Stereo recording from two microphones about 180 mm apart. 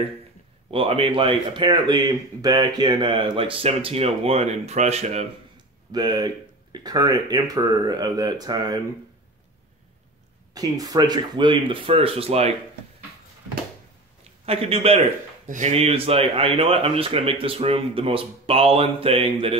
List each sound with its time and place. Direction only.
0.7 s speech: 30° right (ahead or behind)
5.9 s speech: 20° right (ahead or behind)
10.5 s speech: 20° right (ahead or behind)
14.4 s a man's voice: 35° right (ahead or behind)
15.4 s speech: 45° right (ahead or behind)